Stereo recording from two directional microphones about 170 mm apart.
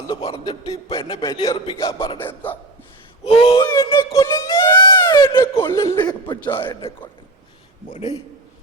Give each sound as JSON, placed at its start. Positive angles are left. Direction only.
{"t": 0.2, "sound": "a sound", "side_deg": 35}
{"t": 0.4, "sound": "a man's voice", "side_deg": 20}
{"t": 3.2, "sound": "a man's voice", "side_deg": 35}
{"t": 3.6, "sound": "a sound", "side_deg": 20}
{"t": 5.4, "sound": "a man's voice", "side_deg": 15}
{"t": 7.9, "sound": "a man's voice", "side_deg": 40}